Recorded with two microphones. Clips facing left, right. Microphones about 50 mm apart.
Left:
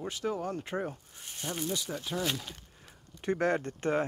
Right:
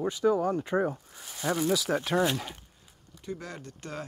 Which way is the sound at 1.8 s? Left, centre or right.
Right.